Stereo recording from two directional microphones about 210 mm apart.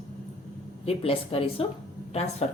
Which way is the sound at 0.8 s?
30° left (ahead or behind).